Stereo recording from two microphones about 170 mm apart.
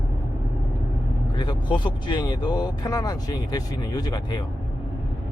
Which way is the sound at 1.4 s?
25° left (ahead or behind).